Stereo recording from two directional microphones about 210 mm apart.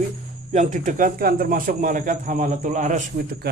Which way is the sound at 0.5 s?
35° right (ahead or behind).